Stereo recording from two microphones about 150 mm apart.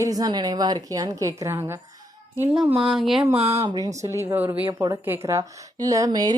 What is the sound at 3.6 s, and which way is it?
A woman's voice, 20° right (ahead or behind).